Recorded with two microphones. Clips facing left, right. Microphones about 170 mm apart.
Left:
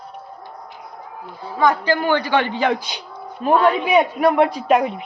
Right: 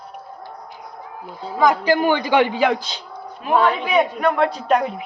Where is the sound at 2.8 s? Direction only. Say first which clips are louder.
Left 1 dB; 15° left (ahead or behind).